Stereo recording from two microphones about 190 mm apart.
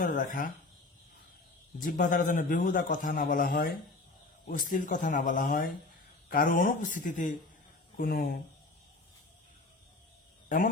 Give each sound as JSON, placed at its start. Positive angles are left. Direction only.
{"t": 0.0, "sound": "a man's voice", "side_deg": 45}
{"t": 1.8, "sound": "a man's voice", "side_deg": 45}
{"t": 4.7, "sound": "a man's voice", "side_deg": 45}